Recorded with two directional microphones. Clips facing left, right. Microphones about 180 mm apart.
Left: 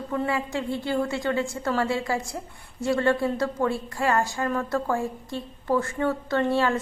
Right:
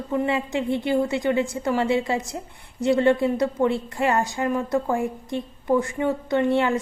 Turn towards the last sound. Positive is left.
turn(degrees=-20)  # may be behind; listen again after turning